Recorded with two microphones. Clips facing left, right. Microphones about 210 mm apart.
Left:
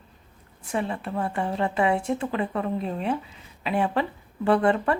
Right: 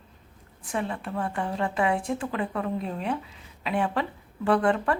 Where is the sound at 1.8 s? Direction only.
Centre (ahead or behind).